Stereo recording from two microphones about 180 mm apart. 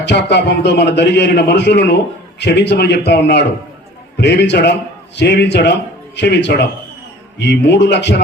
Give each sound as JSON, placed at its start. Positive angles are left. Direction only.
{"t": 0.0, "sound": "a man's voice", "side_deg": 70}